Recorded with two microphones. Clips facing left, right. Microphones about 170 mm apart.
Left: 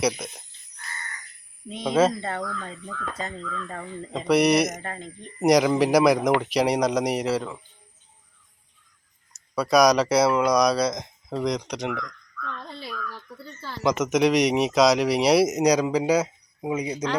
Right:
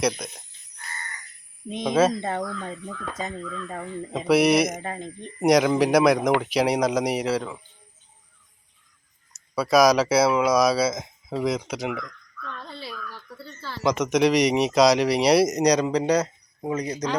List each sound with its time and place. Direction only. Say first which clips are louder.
0.0 s speech: even; centre (ahead or behind)
1.8 s speech: even; centre (ahead or behind)
2.1 s speech: right 2 dB; 20° right (ahead or behind); by 4.8 s centre (ahead or behind)
4.8 s speech: right 3 dB; 15° right (ahead or behind)
5.4 s speech: even; centre (ahead or behind)
9.3 s speech: right 1 dB; centre (ahead or behind)
13.3 s speech: even; 15° left (ahead or behind)
13.8 s speech: even; centre (ahead or behind)